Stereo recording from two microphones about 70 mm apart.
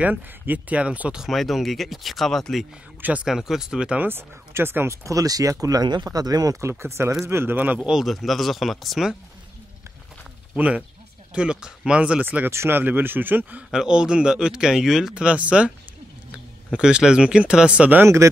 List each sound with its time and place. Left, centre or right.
0.0 s speech: right
1.2 s speech: centre
3.0 s speech: centre
3.3 s speech: centre
4.0 s speech: right
5.0 s speech: right
6.0 s speech: right
6.6 s speech: right
7.8 s speech: centre
10.5 s speech: centre
12.4 s speech: right
13.7 s speech: centre
16.7 s speech: centre
18.0 s speech: right